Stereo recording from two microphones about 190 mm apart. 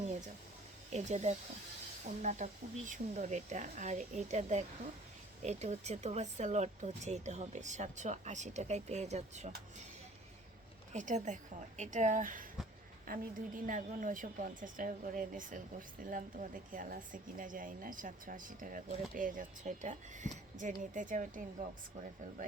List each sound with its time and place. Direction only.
0.9 s speech: 35° right (ahead or behind)
10.9 s speech: 40° right (ahead or behind)